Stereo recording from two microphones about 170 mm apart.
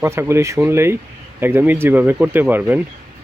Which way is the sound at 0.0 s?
15° right (ahead or behind).